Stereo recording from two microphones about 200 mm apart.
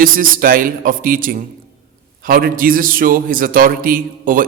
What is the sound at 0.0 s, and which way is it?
A man's voice, 45° right (ahead or behind).